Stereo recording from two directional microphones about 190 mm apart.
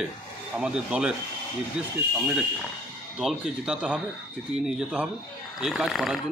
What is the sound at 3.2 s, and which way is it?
Speech, 5° right (ahead or behind).